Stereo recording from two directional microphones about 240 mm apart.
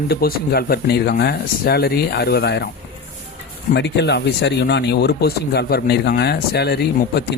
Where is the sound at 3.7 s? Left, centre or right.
Left.